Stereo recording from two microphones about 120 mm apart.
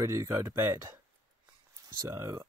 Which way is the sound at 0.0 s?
30° right (ahead or behind).